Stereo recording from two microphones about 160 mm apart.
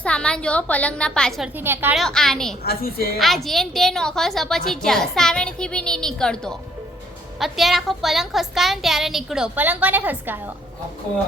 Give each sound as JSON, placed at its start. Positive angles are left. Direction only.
{"t": 0.0, "sound": "a woman's voice", "side_deg": 5}
{"t": 1.5, "sound": "a woman's voice", "side_deg": -15}
{"t": 2.0, "sound": "a woman's voice", "side_deg": 5}
{"t": 2.6, "sound": "a woman's voice", "side_deg": 70}
{"t": 3.2, "sound": "a woman's voice", "side_deg": 0}